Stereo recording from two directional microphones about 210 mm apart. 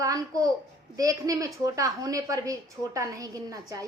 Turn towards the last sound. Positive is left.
turn(degrees=-15)  # may be behind; listen again after turning